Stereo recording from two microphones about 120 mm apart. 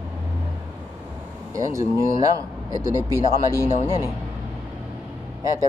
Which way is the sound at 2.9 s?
30° right (ahead or behind).